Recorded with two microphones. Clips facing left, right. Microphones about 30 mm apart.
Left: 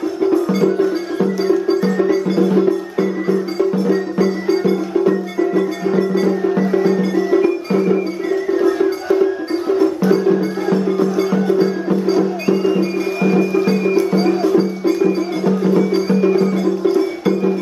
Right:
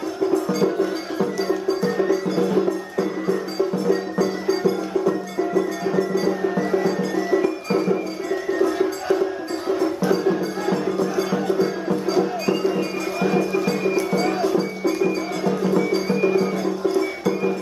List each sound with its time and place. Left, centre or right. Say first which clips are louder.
2.3 s music: left 7 dB; centre
3.8 s music: left 5 dB; centre
5.0 s music: left 6 dB; left
6.6 s music: left 6 dB; centre
7.3 s music: left 5 dB; left
8.5 s music: left 4 dB; centre